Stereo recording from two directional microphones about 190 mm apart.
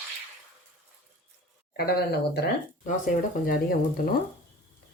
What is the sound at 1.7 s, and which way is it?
Speech, 60° left (ahead or behind).